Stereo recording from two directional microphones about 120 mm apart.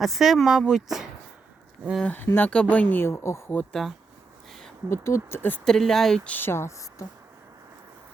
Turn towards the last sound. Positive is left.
turn(degrees=25)  # may be behind; listen again after turning